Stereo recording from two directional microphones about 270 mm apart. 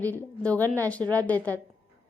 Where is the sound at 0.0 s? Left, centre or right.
Centre.